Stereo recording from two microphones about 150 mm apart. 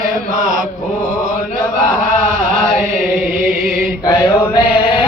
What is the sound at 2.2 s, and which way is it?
Chant, 60° right (ahead or behind).